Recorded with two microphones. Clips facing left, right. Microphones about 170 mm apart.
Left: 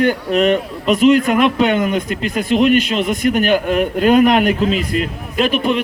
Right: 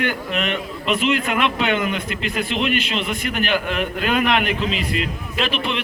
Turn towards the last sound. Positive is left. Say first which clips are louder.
# left 7 dB
turn(degrees=45)  # may be behind; listen again after turning